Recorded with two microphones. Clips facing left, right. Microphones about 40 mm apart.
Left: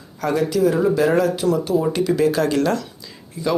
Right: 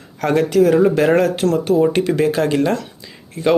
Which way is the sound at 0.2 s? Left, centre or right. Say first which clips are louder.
Right 4 dB; right.